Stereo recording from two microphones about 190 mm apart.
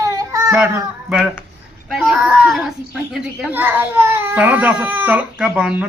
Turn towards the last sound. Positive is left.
turn(degrees=-5)  # may be behind; listen again after turning